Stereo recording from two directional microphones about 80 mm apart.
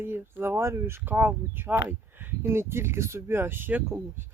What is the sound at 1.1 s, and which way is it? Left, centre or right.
Speech, right.